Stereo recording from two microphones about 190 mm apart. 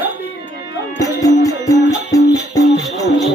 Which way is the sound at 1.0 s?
20° left (ahead or behind).